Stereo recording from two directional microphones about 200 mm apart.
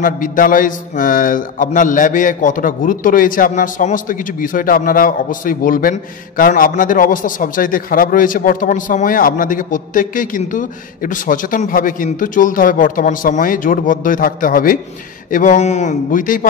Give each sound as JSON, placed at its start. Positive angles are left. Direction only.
{"t": 0.0, "sound": "a man's voice", "side_deg": 45}